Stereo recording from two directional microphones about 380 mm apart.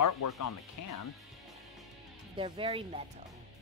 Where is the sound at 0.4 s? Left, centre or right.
Left.